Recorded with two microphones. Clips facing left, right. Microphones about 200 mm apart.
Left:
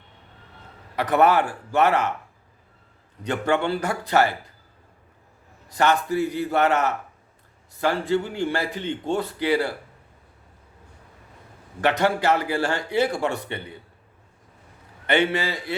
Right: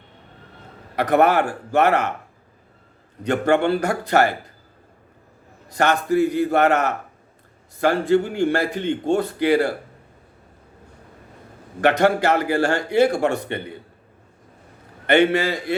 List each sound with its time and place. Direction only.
0.9 s speech: 50° right (ahead or behind)
3.2 s speech: 45° right (ahead or behind)
5.6 s speech: 50° right (ahead or behind)
11.8 s speech: 50° right (ahead or behind)
15.0 s speech: 50° right (ahead or behind)